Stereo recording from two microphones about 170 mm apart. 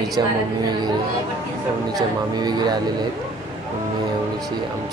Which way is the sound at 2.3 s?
25° right (ahead or behind).